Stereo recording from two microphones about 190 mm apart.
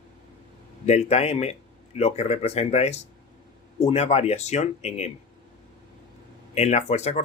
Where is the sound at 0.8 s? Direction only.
35° left (ahead or behind).